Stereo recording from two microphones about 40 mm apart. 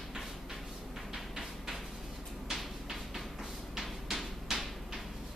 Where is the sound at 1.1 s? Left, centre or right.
Centre.